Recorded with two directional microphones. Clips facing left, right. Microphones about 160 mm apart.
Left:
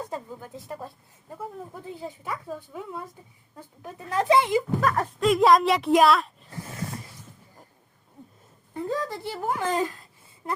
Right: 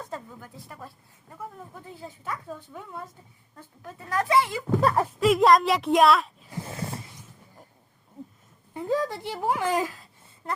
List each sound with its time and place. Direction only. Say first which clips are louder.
0.1 s speech: left 3 dB; 20° left (ahead or behind)
2.0 s a woman's voice: even; 15° left (ahead or behind)
4.9 s speech: right 1 dB; centre (ahead or behind)
8.7 s speech: right 2 dB; 15° right (ahead or behind)